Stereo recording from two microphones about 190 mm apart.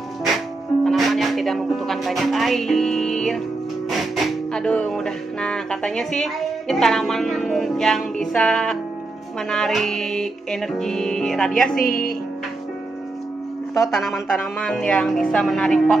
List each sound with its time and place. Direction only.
0.8 s speech: centre (ahead or behind)
3.9 s music: centre (ahead or behind)
11.8 s speech: 50° left (ahead or behind)
13.7 s music: centre (ahead or behind)